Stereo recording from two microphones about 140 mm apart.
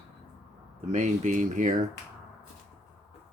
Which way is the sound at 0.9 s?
60° right (ahead or behind).